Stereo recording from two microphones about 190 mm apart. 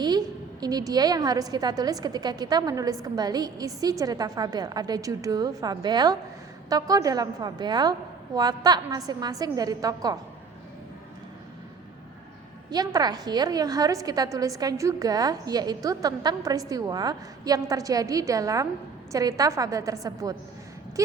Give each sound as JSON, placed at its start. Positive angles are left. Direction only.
{"t": 0.0, "sound": "a woman's voice", "side_deg": -20}
{"t": 12.7, "sound": "a woman's voice", "side_deg": -20}